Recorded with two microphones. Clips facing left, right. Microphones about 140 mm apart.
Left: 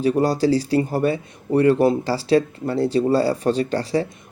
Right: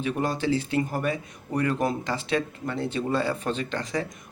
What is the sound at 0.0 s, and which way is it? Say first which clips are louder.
Speech: left 8 dB; 35° left (ahead or behind).